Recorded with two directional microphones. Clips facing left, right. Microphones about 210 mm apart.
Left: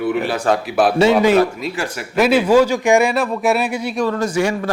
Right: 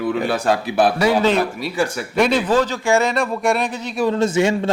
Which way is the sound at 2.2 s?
5° left (ahead or behind).